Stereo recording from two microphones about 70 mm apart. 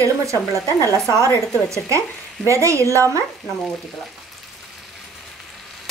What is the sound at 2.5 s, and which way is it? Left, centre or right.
Speech, right.